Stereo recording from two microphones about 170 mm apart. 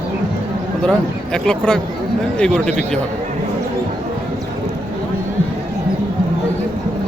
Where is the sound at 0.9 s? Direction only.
5° left (ahead or behind).